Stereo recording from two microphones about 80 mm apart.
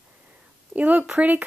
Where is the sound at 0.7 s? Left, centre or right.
Centre.